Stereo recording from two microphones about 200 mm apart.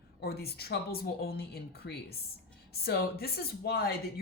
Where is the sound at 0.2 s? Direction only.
50° left (ahead or behind).